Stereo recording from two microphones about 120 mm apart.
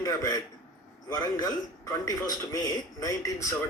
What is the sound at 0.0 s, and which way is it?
A man's voice, 30° left (ahead or behind).